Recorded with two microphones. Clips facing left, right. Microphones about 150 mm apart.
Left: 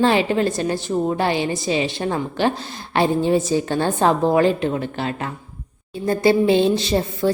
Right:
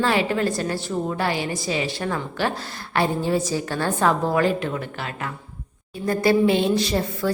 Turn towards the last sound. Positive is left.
turn(degrees=25)  # may be behind; listen again after turning